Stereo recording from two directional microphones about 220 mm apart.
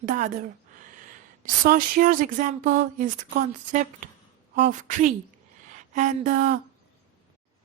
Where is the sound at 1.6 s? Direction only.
40° right (ahead or behind).